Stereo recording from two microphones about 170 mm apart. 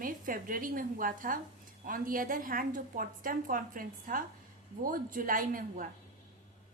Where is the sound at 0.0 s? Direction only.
55° right (ahead or behind).